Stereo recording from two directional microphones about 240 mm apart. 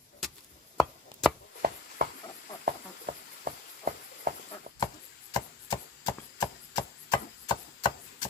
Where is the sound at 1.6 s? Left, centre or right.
Right.